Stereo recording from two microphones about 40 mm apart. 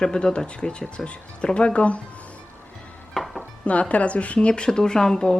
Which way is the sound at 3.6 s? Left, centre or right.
Left.